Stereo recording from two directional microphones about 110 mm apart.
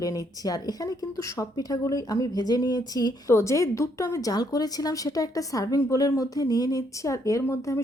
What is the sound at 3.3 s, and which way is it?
A woman's voice, 25° left (ahead or behind).